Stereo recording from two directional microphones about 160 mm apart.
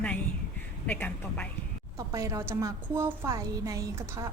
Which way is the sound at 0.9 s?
10° left (ahead or behind).